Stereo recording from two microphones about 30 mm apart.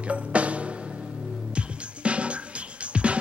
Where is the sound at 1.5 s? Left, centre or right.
Right.